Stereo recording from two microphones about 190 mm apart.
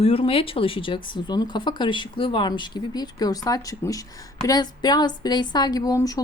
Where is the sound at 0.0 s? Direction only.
30° left (ahead or behind).